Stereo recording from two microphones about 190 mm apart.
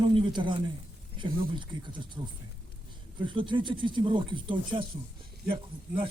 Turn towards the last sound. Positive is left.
turn(degrees=-25)  # may be behind; listen again after turning